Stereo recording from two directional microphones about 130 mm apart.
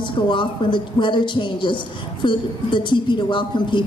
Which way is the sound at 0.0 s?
40° left (ahead or behind).